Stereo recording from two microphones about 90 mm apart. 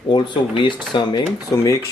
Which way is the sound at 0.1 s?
60° left (ahead or behind).